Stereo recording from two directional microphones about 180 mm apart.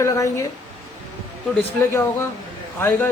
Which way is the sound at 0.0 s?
15° left (ahead or behind).